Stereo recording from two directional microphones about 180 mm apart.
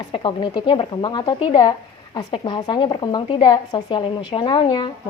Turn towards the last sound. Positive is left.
turn(degrees=30)  # may be behind; listen again after turning